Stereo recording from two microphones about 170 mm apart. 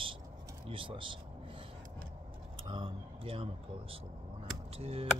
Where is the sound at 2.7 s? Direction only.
30° right (ahead or behind).